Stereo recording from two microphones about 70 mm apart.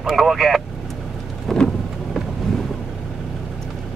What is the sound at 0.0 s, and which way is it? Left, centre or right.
Speech, centre.